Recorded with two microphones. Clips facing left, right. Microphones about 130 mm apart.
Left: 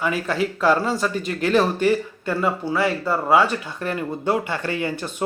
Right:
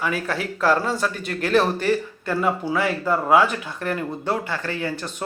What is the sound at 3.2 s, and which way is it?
Speech, 10° right (ahead or behind).